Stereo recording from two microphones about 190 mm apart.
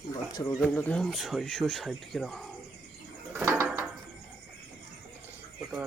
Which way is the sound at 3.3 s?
10° right (ahead or behind).